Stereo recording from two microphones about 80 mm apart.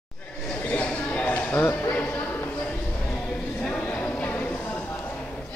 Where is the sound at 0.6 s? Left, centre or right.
Centre.